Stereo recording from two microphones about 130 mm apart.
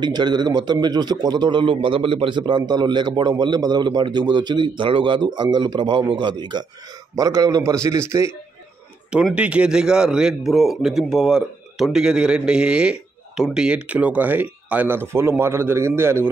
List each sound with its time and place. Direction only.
0.0 s a man's voice: 35° right (ahead or behind)
9.1 s a man's voice: 10° right (ahead or behind)